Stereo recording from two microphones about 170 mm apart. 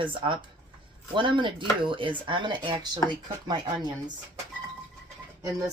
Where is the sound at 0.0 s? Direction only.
30° right (ahead or behind).